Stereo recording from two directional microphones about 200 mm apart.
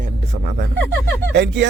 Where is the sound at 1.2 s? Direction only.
60° right (ahead or behind).